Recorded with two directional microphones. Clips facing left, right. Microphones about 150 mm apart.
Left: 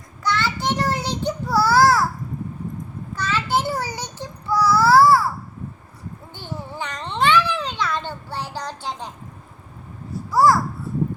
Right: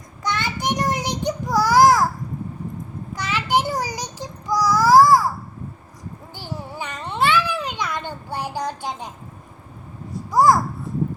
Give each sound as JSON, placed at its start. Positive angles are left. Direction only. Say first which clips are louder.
{"t": 0.2, "sound": "a sound", "louder": "left 2 dB", "side_deg": -15}
{"t": 3.1, "sound": "child singing", "louder": "right 1 dB", "side_deg": -15}
{"t": 6.4, "sound": "babbling", "louder": "even", "side_deg": -10}
{"t": 10.3, "sound": "babbling", "louder": "right 1 dB", "side_deg": -15}